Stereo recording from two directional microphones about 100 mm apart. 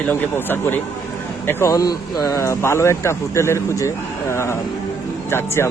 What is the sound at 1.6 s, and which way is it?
A man's voice, 35° left (ahead or behind).